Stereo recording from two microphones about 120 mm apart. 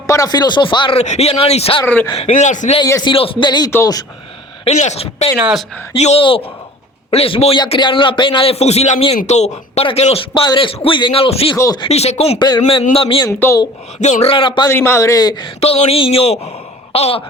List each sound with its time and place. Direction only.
0.1 s speech: 30° left (ahead or behind)
0.9 s speech: 65° left (ahead or behind)
1.8 s speech: 20° left (ahead or behind)
2.1 s speech: 70° left (ahead or behind)
3.0 s speech: 45° left (ahead or behind)
4.6 s speech: 70° left (ahead or behind)
10.4 s speech: 40° left (ahead or behind)
11.5 s speech: 25° left (ahead or behind)
11.9 s speech: 65° left (ahead or behind)
12.4 s speech: 35° left (ahead or behind)
12.9 s speech: 50° left (ahead or behind)
14.0 s speech: 70° left (ahead or behind); by 14.7 s 45° left (ahead or behind)
14.7 s speech: 20° left (ahead or behind); by 15.5 s 35° left (ahead or behind)
15.6 s speech: 60° left (ahead or behind)